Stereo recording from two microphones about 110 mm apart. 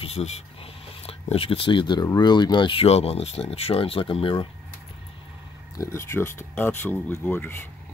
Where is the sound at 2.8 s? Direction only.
65° left (ahead or behind).